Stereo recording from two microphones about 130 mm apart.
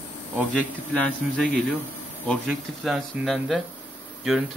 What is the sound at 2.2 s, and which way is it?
Speech, centre (ahead or behind).